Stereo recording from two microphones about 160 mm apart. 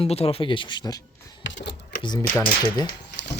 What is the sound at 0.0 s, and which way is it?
Speech, 40° left (ahead or behind).